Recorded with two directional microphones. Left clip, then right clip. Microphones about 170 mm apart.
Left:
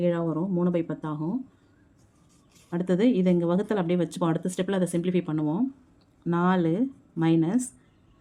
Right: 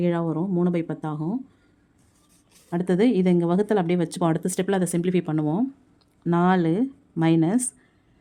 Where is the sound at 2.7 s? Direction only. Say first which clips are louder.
Right 3 dB; 30° right (ahead or behind).